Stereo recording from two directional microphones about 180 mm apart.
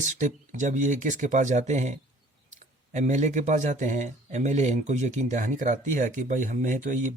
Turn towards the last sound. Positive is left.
turn(degrees=-45)  # may be behind; listen again after turning